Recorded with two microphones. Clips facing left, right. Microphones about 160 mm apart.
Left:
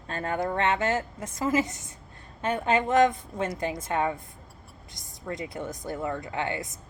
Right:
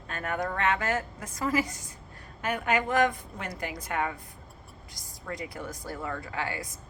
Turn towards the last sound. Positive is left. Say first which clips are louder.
# left 3 dB
turn(degrees=25)  # may be behind; listen again after turning